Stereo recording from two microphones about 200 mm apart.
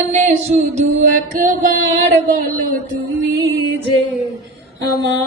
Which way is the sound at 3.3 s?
55° right (ahead or behind).